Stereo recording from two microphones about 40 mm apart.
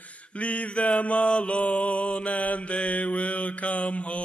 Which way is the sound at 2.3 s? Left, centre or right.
Left.